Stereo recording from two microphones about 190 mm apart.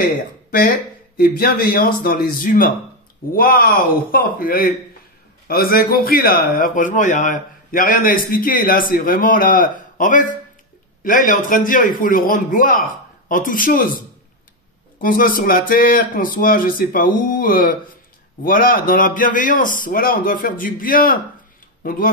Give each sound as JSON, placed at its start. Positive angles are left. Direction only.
{"t": 1.1, "sound": "a man's voice", "side_deg": 50}